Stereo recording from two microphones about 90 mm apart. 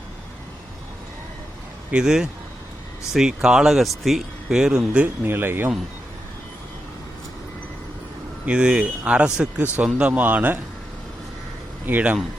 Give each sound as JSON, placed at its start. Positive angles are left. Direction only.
{"t": 1.9, "sound": "speech", "side_deg": -10}
{"t": 5.0, "sound": "speech", "side_deg": -25}
{"t": 8.4, "sound": "speech", "side_deg": -10}
{"t": 11.9, "sound": "speech", "side_deg": -15}